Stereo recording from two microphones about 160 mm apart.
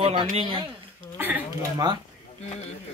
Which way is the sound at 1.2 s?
10° right (ahead or behind).